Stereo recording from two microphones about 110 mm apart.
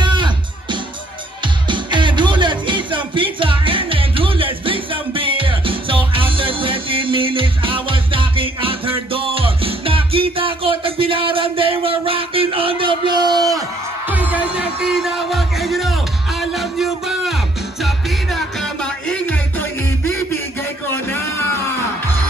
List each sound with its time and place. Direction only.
0.0 s music: 45° right (ahead or behind)
14.0 s music: 15° right (ahead or behind); by 22.1 s 20° left (ahead or behind)